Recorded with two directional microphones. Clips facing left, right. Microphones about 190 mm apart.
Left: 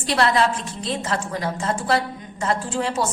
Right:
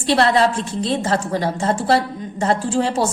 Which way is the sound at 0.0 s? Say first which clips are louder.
Right 4 dB; 30° right (ahead or behind).